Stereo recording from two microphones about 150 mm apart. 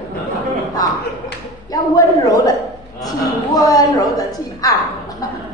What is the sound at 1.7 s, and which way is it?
Speech, 25° left (ahead or behind).